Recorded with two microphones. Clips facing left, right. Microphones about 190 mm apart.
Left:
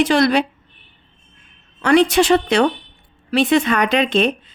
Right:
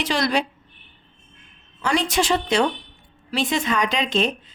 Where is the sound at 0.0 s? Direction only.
55° left (ahead or behind).